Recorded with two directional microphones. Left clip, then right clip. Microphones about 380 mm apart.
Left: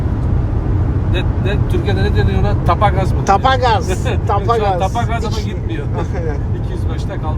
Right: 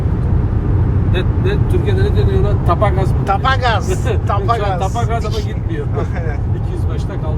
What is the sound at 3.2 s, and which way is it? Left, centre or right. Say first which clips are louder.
Speech: left 3 dB; centre.